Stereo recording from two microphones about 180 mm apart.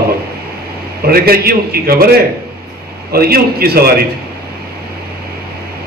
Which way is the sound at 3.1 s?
60° right (ahead or behind).